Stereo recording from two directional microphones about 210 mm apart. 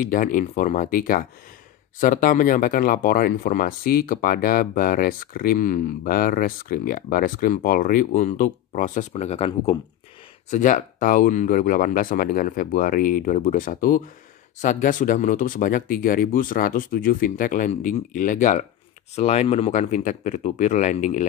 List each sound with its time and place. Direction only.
0.0 s speech: 40° left (ahead or behind)